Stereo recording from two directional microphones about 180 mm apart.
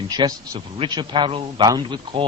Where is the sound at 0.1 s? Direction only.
20° right (ahead or behind).